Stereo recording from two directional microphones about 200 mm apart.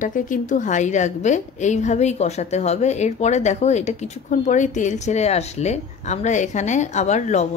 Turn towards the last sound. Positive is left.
turn(degrees=35)  # may be behind; listen again after turning